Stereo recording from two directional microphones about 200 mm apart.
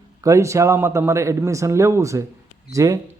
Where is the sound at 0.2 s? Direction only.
15° right (ahead or behind).